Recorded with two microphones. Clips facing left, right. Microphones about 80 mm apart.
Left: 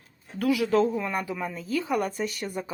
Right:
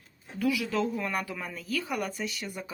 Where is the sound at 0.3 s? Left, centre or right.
Left.